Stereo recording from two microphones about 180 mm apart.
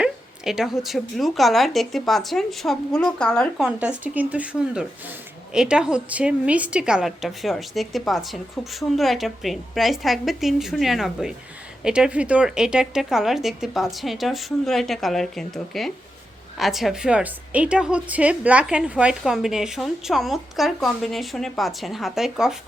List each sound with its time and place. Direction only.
0.0 s a woman's voice: centre (ahead or behind)
3.7 s a woman's voice: 10° right (ahead or behind)